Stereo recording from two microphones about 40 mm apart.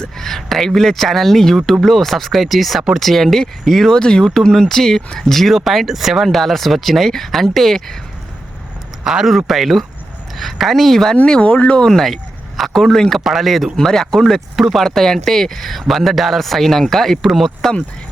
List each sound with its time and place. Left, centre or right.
0.2 s speech: centre
3.9 s speech: centre
6.3 s speech: centre
9.0 s speech: centre
11.3 s speech: left
11.9 s speech: centre
14.5 s speech: centre
14.8 s speech: centre